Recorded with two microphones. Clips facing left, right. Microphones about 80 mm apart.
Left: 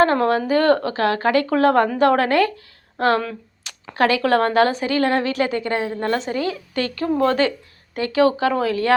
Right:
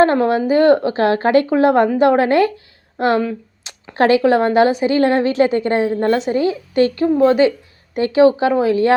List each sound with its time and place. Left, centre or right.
0.2 s a woman's voice: centre